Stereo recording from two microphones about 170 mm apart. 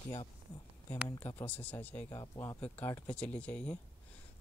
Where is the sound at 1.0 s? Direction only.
15° left (ahead or behind).